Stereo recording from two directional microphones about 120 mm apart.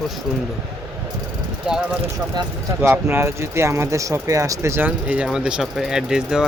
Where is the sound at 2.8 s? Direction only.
20° right (ahead or behind).